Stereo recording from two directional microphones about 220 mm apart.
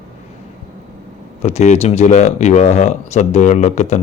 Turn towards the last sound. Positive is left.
turn(degrees=30)  # may be behind; listen again after turning